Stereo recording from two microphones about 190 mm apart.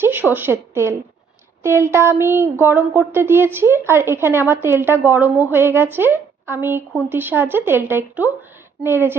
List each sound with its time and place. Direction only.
0.0 s speech: 10° right (ahead or behind)